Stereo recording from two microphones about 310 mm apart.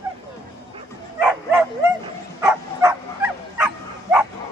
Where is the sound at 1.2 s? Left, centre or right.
Centre.